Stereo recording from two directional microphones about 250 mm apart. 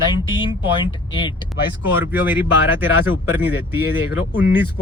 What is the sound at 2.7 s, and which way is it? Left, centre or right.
Speech, centre.